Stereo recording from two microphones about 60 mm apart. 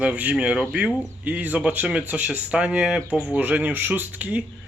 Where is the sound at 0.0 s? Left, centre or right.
Right.